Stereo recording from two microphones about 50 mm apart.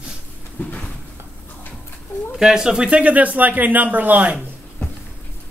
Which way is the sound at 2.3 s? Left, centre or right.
Centre.